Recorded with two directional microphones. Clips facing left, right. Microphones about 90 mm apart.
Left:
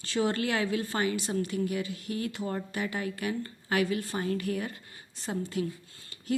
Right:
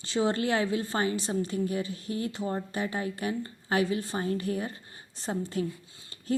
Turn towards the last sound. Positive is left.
turn(degrees=-35)  # may be behind; listen again after turning